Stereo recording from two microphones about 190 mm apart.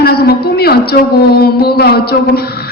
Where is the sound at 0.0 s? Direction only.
55° left (ahead or behind).